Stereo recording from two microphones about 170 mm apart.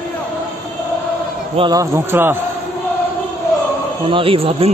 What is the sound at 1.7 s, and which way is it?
Speech, 15° right (ahead or behind).